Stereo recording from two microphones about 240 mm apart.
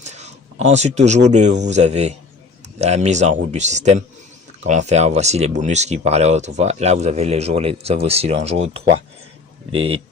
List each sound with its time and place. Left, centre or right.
0.0 s speech: right
8.8 s speech: right
9.7 s speech: right